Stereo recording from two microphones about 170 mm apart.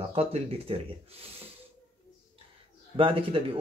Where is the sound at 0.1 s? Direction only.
35° right (ahead or behind).